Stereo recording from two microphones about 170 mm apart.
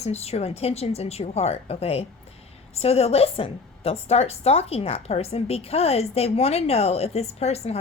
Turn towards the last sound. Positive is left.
turn(degrees=40)  # may be behind; listen again after turning